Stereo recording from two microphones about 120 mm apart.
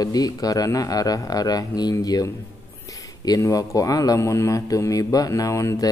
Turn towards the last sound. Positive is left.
turn(degrees=25)  # may be behind; listen again after turning